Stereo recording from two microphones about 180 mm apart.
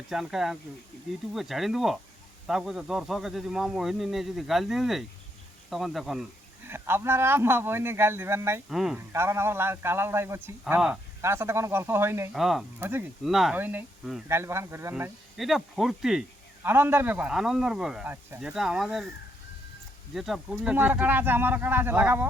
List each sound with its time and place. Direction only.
0.1 s a man's voice: centre (ahead or behind)
6.7 s speech: 10° right (ahead or behind)
8.7 s a man's voice: centre (ahead or behind)
9.0 s a man's voice: 15° right (ahead or behind)
12.3 s a man's voice: centre (ahead or behind)
12.8 s speech: 10° right (ahead or behind)
13.2 s a man's voice: centre (ahead or behind)
15.4 s a man's voice: centre (ahead or behind)
20.1 s speech: centre (ahead or behind)